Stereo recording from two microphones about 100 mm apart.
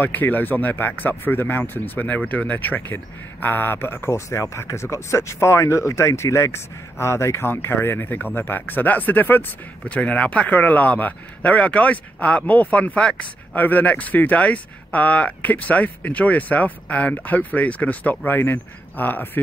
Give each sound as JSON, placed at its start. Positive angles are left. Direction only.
{"t": 0.0, "sound": "speech", "side_deg": 20}